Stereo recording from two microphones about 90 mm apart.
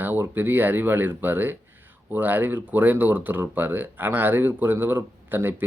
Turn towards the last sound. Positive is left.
turn(degrees=-20)  # may be behind; listen again after turning